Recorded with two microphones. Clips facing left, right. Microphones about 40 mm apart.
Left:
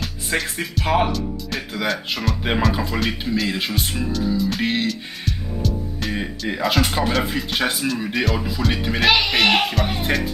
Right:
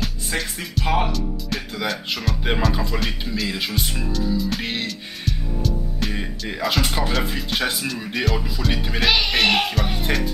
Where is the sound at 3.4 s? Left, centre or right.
Centre.